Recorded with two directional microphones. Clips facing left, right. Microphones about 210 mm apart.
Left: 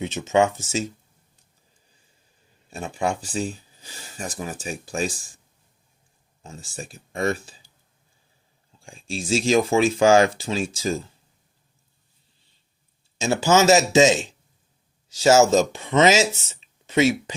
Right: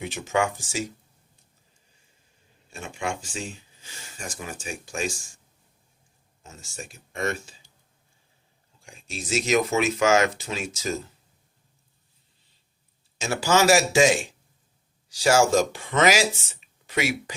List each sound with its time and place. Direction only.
0.0 s speech: 20° left (ahead or behind)
2.6 s speech: 35° left (ahead or behind)
6.4 s speech: 30° left (ahead or behind)
8.8 s speech: 30° left (ahead or behind)
13.1 s speech: 25° left (ahead or behind)